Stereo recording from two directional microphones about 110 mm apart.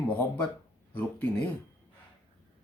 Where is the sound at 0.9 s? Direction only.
15° left (ahead or behind).